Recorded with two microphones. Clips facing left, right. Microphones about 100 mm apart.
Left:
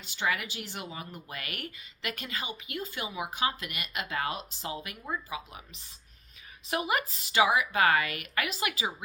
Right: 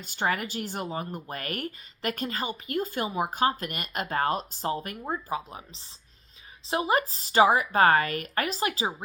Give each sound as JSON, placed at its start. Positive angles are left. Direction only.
{"t": 0.0, "sound": "speech", "side_deg": -45}